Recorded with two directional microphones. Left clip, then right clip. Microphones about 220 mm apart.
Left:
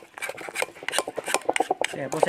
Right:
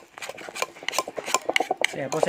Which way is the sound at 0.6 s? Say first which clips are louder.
Even; 20° left (ahead or behind).